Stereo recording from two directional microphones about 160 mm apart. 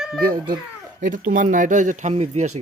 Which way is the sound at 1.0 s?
55° right (ahead or behind).